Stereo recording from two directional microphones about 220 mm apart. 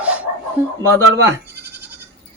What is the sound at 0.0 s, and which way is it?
Chicken, 5° right (ahead or behind).